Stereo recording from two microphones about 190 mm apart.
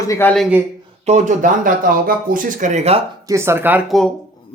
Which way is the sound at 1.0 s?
35° right (ahead or behind).